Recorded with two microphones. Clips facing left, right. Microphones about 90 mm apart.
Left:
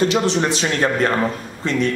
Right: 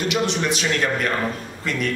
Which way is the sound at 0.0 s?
35° left (ahead or behind).